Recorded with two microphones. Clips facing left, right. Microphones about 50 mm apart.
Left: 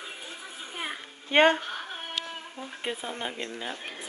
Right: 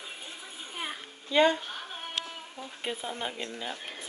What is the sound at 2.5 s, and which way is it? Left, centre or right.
Speech, centre.